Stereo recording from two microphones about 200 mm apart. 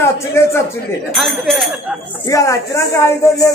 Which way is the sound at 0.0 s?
15° left (ahead or behind).